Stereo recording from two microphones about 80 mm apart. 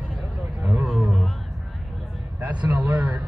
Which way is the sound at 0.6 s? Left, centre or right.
Centre.